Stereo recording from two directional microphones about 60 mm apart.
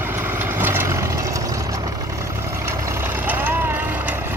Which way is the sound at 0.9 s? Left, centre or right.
Right.